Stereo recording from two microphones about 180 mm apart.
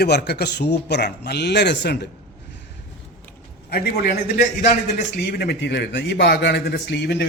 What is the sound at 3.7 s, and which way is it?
A man's voice, 60° left (ahead or behind).